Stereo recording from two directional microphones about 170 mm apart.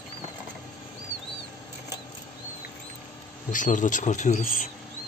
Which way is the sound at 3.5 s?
50° left (ahead or behind).